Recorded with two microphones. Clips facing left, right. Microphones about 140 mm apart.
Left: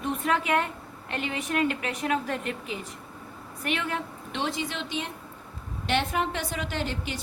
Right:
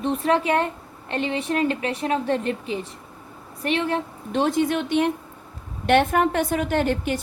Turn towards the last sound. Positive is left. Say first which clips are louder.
# right 10 dB
turn(degrees=-55)  # may be behind; listen again after turning